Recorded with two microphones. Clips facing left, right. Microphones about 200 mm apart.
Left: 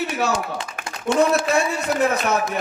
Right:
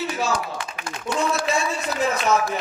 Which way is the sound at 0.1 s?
65° left (ahead or behind).